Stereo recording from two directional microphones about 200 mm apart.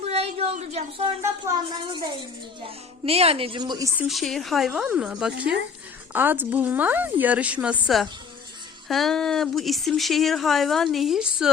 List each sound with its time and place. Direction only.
0.0 s a sound: 30° right (ahead or behind)
1.8 s a woman's voice: 20° right (ahead or behind)
4.0 s a woman's voice: centre (ahead or behind)